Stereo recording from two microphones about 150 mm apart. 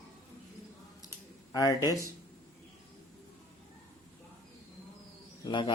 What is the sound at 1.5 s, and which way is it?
Speech, 25° left (ahead or behind).